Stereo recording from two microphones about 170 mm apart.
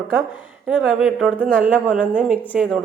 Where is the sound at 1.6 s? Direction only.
10° right (ahead or behind).